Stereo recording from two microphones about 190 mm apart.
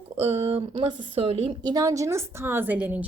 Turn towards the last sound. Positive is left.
turn(degrees=-10)  # may be behind; listen again after turning